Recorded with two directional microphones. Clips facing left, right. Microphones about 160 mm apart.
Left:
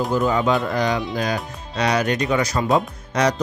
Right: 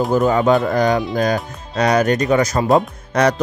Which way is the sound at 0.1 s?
45° right (ahead or behind).